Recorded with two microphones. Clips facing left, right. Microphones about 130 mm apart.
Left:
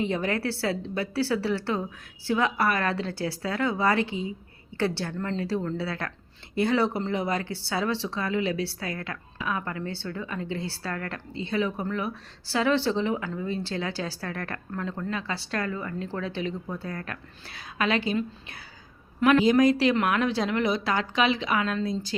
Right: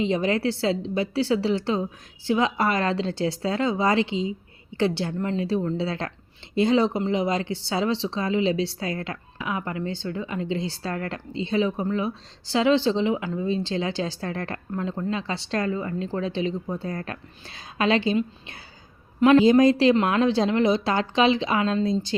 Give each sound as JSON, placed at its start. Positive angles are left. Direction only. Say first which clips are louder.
{"t": 0.0, "sound": "speech", "louder": "right 4 dB", "side_deg": -20}